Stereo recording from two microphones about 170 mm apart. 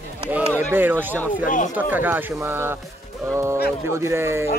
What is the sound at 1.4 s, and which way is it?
Speech, 50° left (ahead or behind).